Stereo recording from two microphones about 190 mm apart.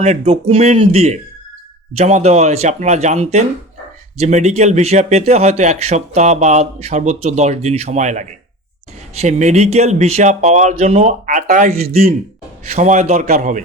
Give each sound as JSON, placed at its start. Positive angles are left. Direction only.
{"t": 0.0, "sound": "a man's voice", "side_deg": -35}